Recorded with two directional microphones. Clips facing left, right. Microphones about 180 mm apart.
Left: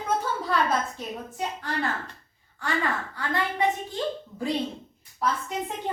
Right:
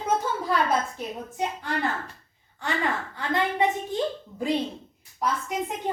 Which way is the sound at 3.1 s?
20° right (ahead or behind).